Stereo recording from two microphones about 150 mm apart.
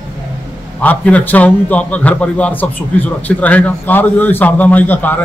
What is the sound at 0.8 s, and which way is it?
A man's voice, 10° left (ahead or behind).